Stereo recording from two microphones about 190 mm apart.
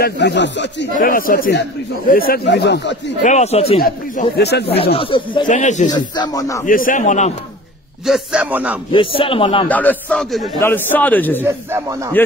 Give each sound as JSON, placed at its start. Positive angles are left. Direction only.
{"t": 0.0, "sound": "speech", "side_deg": 65}
{"t": 0.9, "sound": "speech", "side_deg": 50}
{"t": 3.2, "sound": "speech", "side_deg": 40}
{"t": 3.8, "sound": "speech", "side_deg": 50}
{"t": 4.9, "sound": "speech", "side_deg": 25}
{"t": 5.5, "sound": "speech", "side_deg": 40}
{"t": 5.9, "sound": "speech", "side_deg": 20}
{"t": 6.6, "sound": "speech", "side_deg": 45}
{"t": 8.0, "sound": "a man's voice", "side_deg": -5}
{"t": 8.9, "sound": "speech", "side_deg": 30}
{"t": 9.7, "sound": "a man's voice", "side_deg": 10}
{"t": 11.4, "sound": "speech", "side_deg": -15}